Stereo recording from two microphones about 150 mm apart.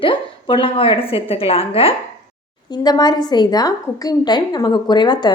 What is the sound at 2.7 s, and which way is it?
A woman's voice, 25° left (ahead or behind).